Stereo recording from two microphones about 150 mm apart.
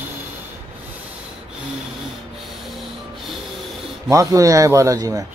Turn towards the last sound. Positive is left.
turn(degrees=-20)  # may be behind; listen again after turning